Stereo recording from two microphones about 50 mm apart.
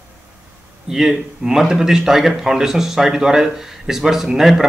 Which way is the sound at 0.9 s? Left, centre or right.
Centre.